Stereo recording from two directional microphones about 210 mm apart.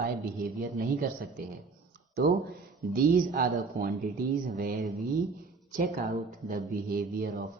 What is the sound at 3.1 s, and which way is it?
Speech, 40° right (ahead or behind).